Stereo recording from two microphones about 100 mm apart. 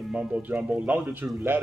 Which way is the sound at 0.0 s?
10° right (ahead or behind).